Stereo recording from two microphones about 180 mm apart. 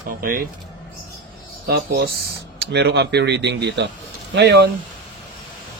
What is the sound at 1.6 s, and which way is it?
Speech, 60° right (ahead or behind).